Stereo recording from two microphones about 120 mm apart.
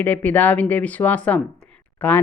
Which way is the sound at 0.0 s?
15° left (ahead or behind).